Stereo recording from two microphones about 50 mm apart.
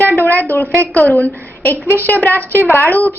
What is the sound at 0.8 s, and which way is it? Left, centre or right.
Speech, left.